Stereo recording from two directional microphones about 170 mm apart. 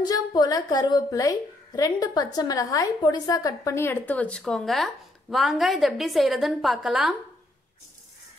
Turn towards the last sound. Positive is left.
turn(degrees=-5)  # may be behind; listen again after turning